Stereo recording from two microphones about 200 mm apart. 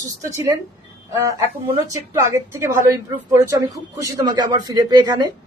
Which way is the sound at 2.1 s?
15° right (ahead or behind).